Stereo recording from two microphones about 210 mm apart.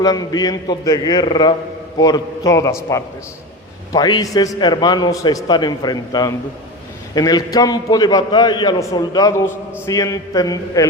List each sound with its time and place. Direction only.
0.0 s a man's voice: 20° left (ahead or behind)